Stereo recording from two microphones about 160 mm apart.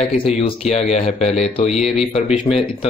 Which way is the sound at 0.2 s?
40° left (ahead or behind).